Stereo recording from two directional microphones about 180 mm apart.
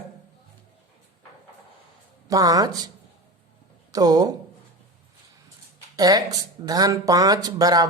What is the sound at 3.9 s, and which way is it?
Speech, 20° right (ahead or behind).